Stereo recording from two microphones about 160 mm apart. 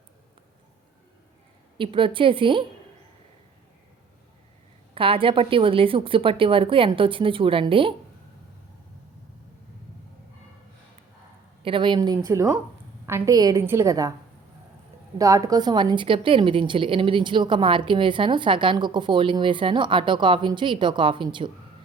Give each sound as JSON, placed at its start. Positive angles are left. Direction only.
{"t": 1.8, "sound": "a woman's voice", "side_deg": -35}
{"t": 4.9, "sound": "a woman's voice", "side_deg": -35}
{"t": 11.6, "sound": "a woman's voice", "side_deg": -30}
{"t": 15.2, "sound": "a woman's voice", "side_deg": -20}